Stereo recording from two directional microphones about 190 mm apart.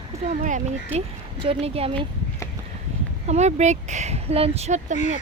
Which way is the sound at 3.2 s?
35° right (ahead or behind).